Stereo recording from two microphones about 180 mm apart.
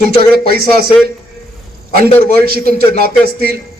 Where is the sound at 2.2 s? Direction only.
55° right (ahead or behind).